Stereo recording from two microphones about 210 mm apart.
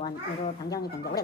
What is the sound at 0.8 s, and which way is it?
Speech, 45° left (ahead or behind).